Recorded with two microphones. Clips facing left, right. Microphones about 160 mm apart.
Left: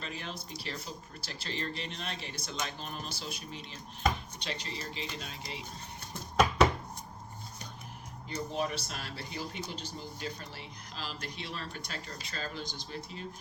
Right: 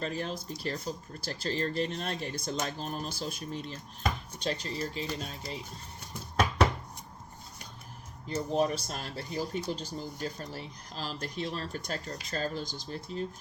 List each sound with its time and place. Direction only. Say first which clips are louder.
0.0 s speech: right 7 dB; 40° right (ahead or behind)
8.3 s speech: right 6 dB; 45° right (ahead or behind)